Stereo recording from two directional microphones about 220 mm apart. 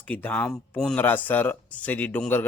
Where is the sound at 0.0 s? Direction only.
5° left (ahead or behind).